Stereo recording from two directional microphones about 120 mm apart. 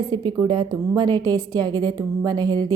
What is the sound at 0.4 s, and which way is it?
A woman's voice, 40° right (ahead or behind).